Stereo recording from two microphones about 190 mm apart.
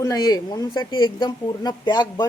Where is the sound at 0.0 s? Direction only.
20° left (ahead or behind).